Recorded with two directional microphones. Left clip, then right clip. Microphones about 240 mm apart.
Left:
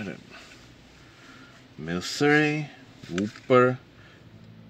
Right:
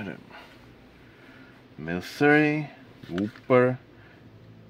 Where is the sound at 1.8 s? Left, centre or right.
Centre.